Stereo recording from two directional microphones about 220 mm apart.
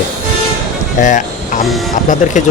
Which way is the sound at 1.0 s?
35° left (ahead or behind).